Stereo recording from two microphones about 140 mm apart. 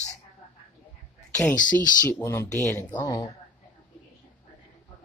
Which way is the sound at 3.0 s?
30° left (ahead or behind).